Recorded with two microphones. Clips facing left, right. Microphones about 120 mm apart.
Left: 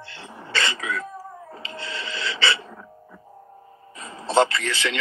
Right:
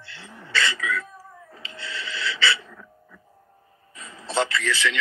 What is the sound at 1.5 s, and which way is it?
Speech, 45° left (ahead or behind).